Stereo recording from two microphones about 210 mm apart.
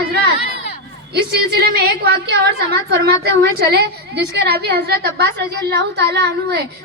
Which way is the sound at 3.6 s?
50° right (ahead or behind).